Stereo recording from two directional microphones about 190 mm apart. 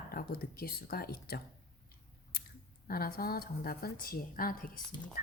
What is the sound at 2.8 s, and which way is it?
Speech, 50° left (ahead or behind).